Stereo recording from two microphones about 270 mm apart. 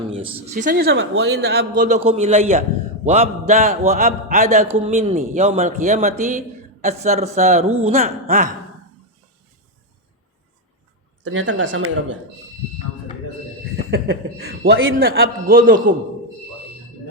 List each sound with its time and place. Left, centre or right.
0.5 s a man's voice: right
11.2 s speech: right
13.9 s a man's voice: right